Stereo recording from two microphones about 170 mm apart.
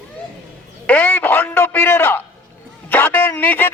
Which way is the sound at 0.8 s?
10° left (ahead or behind).